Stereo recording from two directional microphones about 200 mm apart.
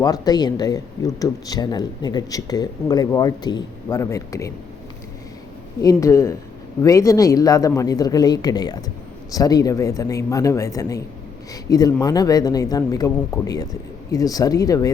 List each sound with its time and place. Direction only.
0.0 s speech: 20° left (ahead or behind)
5.8 s speech: 15° left (ahead or behind)